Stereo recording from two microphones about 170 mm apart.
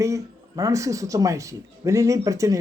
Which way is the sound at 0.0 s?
20° right (ahead or behind).